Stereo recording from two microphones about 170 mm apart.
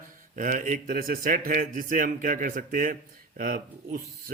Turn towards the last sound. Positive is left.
turn(degrees=-55)  # may be behind; listen again after turning